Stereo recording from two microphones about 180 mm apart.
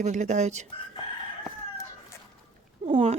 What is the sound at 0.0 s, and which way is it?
Speech, 40° right (ahead or behind).